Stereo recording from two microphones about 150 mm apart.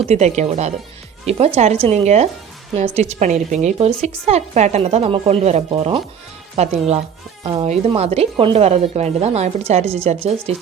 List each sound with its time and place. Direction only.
0.1 s a woman's voice: 50° right (ahead or behind)